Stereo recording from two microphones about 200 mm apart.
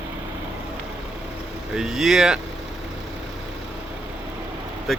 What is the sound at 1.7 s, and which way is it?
Speech, centre (ahead or behind).